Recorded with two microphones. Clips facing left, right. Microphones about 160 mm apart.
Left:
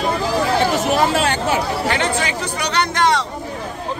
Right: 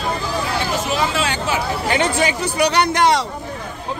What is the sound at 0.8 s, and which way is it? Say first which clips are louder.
Hubbub: left 4 dB; 55° left (ahead or behind).